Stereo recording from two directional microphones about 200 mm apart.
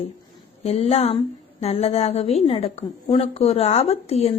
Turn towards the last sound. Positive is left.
turn(degrees=30)  # may be behind; listen again after turning